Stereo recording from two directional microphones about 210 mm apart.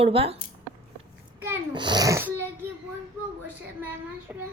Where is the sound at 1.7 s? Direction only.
20° right (ahead or behind).